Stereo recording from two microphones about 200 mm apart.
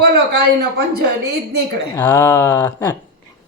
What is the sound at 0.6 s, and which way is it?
Speech, 50° right (ahead or behind).